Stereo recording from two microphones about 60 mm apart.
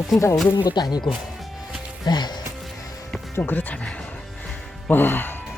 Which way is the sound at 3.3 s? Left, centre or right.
Left.